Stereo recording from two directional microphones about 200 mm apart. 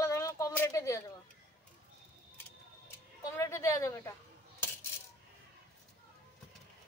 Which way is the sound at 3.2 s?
15° left (ahead or behind).